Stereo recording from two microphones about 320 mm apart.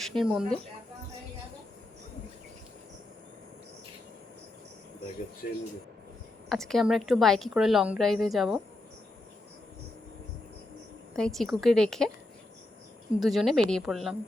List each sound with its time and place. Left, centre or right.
0.0 s a woman's voice: centre
5.4 s speech: left
6.5 s a woman's voice: centre
11.1 s a woman's voice: centre
13.1 s a woman's voice: centre